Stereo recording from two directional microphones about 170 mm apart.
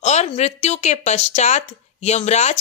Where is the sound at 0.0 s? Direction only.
40° left (ahead or behind).